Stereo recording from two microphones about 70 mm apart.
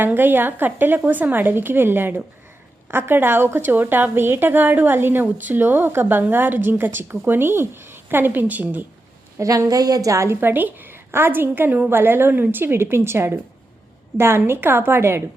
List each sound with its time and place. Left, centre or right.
0.0 s a woman's voice: right
9.4 s a woman's voice: right
10.4 s a woman's voice: right